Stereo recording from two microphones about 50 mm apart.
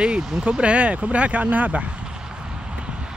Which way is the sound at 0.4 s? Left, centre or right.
Right.